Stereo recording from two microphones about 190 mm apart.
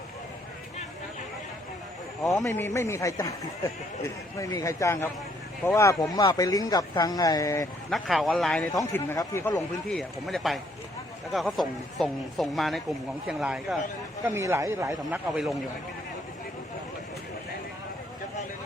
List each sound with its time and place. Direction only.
2.5 s speech: 15° left (ahead or behind)
7.9 s speech: centre (ahead or behind)
8.8 s speech: 15° left (ahead or behind)
9.6 s speech: centre (ahead or behind)
14.3 s speech: 15° right (ahead or behind)
15.3 s speech: centre (ahead or behind)